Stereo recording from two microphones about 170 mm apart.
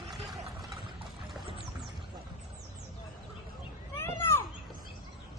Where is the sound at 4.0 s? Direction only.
15° left (ahead or behind).